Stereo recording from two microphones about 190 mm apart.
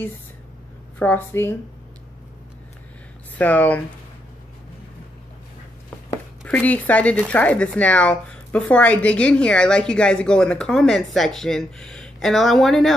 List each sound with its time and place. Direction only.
0.9 s a woman's voice: 10° left (ahead or behind)
3.3 s a woman's voice: 10° left (ahead or behind)
6.4 s speech: 10° left (ahead or behind)